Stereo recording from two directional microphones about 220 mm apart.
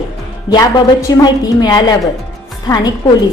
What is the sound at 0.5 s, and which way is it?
A woman's voice, 15° left (ahead or behind).